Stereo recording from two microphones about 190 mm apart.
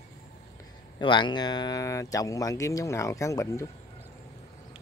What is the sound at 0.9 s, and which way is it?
Speech, 25° left (ahead or behind).